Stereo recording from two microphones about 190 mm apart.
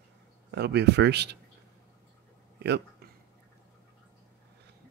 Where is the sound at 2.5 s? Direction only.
60° right (ahead or behind).